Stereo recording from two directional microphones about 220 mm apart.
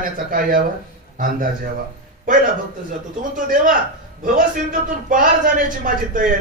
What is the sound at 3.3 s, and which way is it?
A man's voice, 40° right (ahead or behind).